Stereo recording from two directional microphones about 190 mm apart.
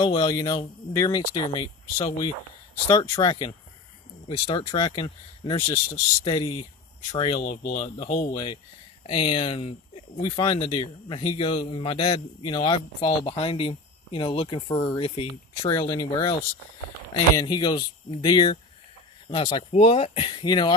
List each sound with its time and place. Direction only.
0.0 s speech: 20° left (ahead or behind)
7.4 s speech: 45° left (ahead or behind); by 16.3 s 20° left (ahead or behind)
17.4 s speech: 20° left (ahead or behind)